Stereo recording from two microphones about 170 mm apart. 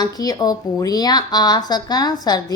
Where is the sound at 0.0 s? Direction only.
20° left (ahead or behind).